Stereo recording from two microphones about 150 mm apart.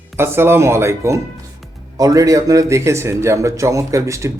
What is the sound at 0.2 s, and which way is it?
A man's voice, 15° right (ahead or behind).